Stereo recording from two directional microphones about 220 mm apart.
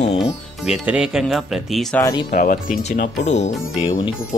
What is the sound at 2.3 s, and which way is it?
Speech, 40° left (ahead or behind).